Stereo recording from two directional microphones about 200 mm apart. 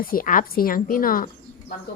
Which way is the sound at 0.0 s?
45° left (ahead or behind).